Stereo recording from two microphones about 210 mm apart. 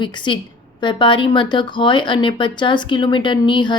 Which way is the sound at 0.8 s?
25° left (ahead or behind).